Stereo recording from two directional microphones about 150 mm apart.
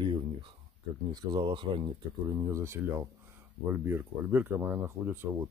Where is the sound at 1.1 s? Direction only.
30° right (ahead or behind); by 5.3 s 15° right (ahead or behind).